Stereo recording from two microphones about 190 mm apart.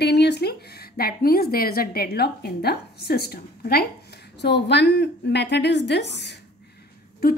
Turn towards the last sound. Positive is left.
turn(degrees=50)  # may be behind; listen again after turning